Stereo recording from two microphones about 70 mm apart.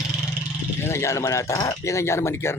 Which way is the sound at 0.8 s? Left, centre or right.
Left.